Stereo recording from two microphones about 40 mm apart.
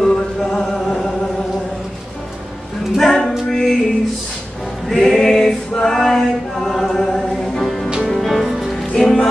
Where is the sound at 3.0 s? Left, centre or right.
Centre.